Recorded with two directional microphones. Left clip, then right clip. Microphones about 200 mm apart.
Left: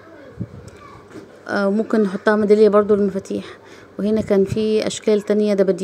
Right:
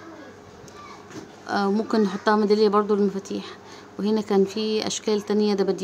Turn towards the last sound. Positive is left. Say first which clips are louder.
# left 6 dB
turn(degrees=15)  # may be behind; listen again after turning